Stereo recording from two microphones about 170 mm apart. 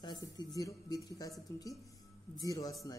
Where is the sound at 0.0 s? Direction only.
25° left (ahead or behind).